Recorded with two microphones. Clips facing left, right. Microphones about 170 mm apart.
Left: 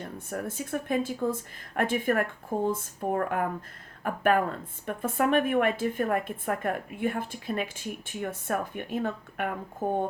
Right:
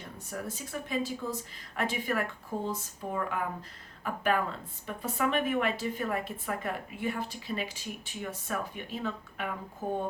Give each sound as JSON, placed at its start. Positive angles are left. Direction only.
{"t": 0.0, "sound": "a woman's voice", "side_deg": 50}